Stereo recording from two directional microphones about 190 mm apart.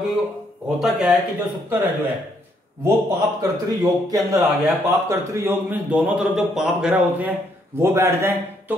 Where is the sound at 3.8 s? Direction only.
20° right (ahead or behind).